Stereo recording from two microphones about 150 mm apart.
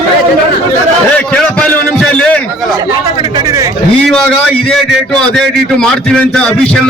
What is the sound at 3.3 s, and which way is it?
Speech, 20° right (ahead or behind).